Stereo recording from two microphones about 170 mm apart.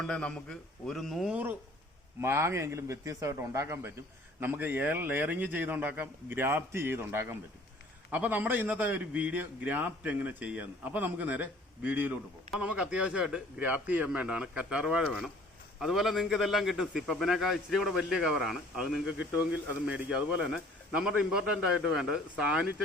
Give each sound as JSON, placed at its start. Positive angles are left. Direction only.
{"t": 0.0, "sound": "a man's voice", "side_deg": 5}